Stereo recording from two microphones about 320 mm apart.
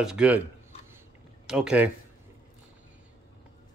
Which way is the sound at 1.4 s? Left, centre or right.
Centre.